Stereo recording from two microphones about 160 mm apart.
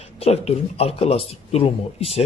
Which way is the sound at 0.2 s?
40° left (ahead or behind).